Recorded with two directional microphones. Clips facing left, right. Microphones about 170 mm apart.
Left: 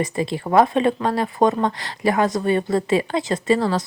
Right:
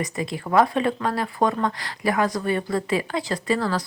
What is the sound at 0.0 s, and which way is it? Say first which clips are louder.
Speech: left 5 dB; 30° left (ahead or behind).